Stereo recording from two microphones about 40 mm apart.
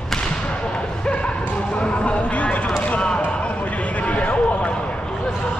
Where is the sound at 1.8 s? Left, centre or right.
Left.